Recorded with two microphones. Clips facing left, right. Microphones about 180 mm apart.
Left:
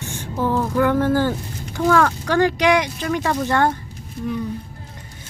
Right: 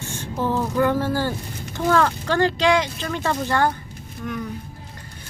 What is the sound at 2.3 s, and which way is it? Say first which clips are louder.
Speech: left 2 dB; 15° left (ahead or behind).